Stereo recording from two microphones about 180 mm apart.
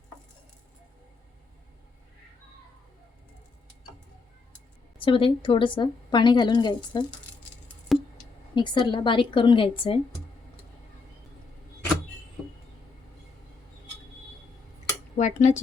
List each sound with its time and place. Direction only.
4.9 s a woman's voice: 30° left (ahead or behind)
7.9 s a sound: centre (ahead or behind)
8.5 s a woman's voice: 25° left (ahead or behind)
15.1 s speech: 40° left (ahead or behind)